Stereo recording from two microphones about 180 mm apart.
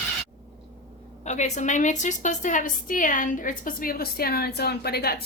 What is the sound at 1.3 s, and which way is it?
A woman's voice, 40° left (ahead or behind).